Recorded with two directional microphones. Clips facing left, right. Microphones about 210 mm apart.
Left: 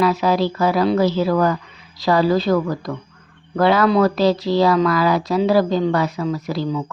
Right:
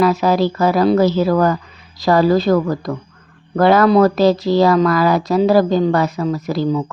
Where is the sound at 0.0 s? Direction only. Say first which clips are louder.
Right 3 dB; 45° right (ahead or behind).